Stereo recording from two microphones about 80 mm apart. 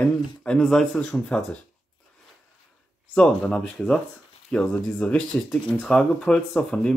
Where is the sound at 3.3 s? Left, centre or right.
Centre.